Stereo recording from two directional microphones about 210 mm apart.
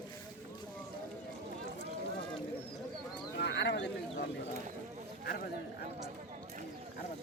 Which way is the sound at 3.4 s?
55° left (ahead or behind).